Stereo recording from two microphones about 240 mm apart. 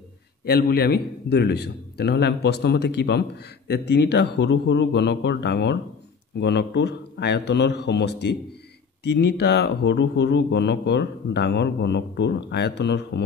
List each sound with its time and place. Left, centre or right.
0.5 s a man's voice: left